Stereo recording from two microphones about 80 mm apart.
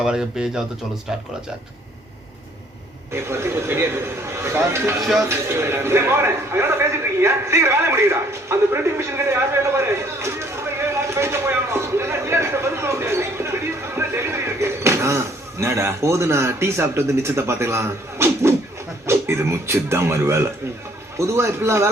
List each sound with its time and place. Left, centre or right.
0.0 s speech: centre
3.1 s a man's voice: right
5.3 s a sound: right
19.0 s speech: right